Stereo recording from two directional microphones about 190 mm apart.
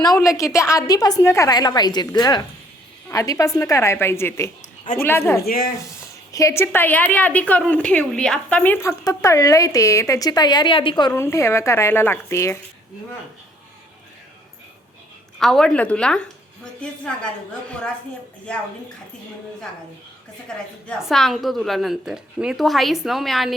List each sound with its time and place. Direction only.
0.2 s a woman's voice: 15° left (ahead or behind)
5.4 s speech: 50° left (ahead or behind)
6.3 s a woman's voice: 15° left (ahead or behind)
15.4 s a woman's voice: centre (ahead or behind)
17.7 s a woman's voice: 5° left (ahead or behind)
20.5 s a woman's voice: 5° left (ahead or behind)